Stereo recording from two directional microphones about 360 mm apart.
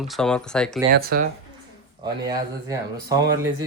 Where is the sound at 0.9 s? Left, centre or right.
Right.